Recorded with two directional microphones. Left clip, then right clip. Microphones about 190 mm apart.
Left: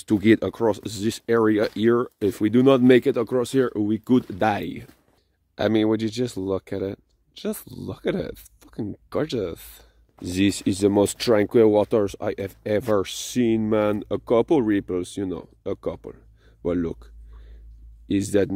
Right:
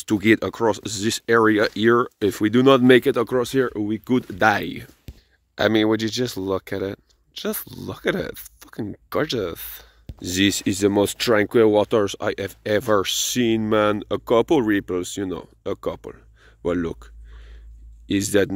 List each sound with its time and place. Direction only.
0.0 s speech: 10° left (ahead or behind)
4.3 s speech: centre (ahead or behind)